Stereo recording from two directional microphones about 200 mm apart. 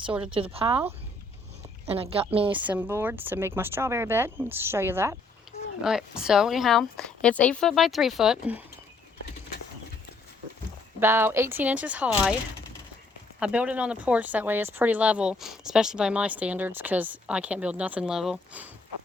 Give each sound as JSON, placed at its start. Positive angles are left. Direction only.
{"t": 0.3, "sound": "a woman's voice", "side_deg": -25}
{"t": 1.9, "sound": "a woman's voice", "side_deg": -30}
{"t": 2.6, "sound": "speech", "side_deg": -10}
{"t": 11.0, "sound": "speech", "side_deg": -10}
{"t": 13.4, "sound": "speech", "side_deg": -5}